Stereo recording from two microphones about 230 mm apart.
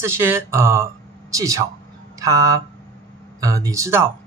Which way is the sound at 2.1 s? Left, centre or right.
Centre.